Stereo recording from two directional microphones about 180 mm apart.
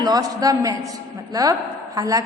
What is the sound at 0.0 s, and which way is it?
A woman's voice, 20° right (ahead or behind).